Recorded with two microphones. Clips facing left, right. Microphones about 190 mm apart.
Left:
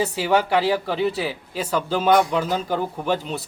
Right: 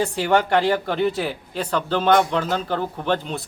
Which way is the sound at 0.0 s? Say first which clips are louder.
Right 1 dB; 5° left (ahead or behind).